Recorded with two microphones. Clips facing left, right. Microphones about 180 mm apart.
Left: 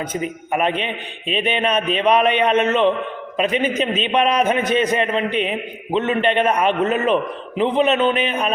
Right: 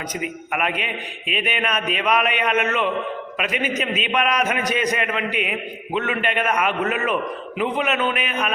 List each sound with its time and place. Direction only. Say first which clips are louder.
0.1 s a man's voice: left 4 dB; 30° left (ahead or behind)